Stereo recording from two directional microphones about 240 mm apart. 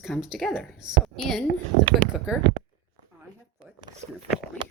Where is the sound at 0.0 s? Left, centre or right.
Centre.